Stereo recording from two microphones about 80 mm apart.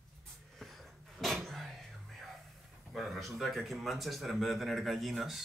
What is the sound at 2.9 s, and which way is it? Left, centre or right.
Speech, centre.